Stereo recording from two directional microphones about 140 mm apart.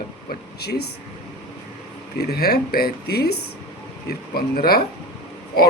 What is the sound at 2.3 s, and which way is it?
Speech, 90° left.